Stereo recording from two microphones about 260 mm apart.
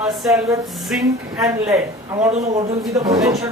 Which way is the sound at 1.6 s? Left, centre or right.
Centre.